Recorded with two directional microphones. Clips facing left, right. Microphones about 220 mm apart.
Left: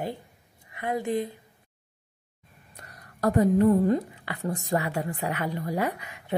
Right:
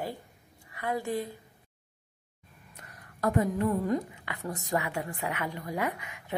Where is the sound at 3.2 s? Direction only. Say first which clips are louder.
Left 6 dB; 35° left (ahead or behind).